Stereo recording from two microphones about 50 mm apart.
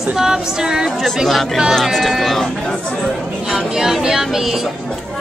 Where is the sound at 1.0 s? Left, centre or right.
Centre.